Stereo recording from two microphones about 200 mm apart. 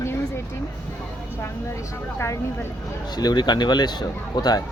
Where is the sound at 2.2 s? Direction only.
15° left (ahead or behind).